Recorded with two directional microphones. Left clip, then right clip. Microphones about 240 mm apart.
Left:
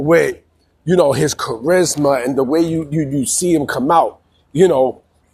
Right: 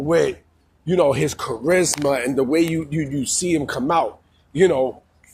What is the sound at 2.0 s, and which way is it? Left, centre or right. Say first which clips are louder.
Speech: left 5 dB; centre.